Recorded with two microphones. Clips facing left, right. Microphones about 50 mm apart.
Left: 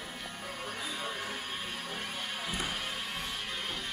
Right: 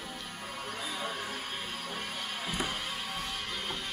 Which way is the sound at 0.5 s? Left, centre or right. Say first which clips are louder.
Right 1 dB; centre.